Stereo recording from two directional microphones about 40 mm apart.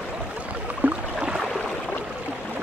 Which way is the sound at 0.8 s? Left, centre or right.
Right.